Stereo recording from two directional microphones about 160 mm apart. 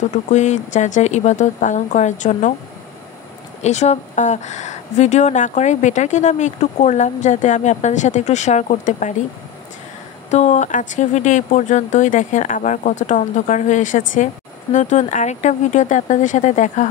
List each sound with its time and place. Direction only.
0.1 s speech: 45° left (ahead or behind)
3.6 s speech: 45° left (ahead or behind)
10.3 s speech: 45° left (ahead or behind)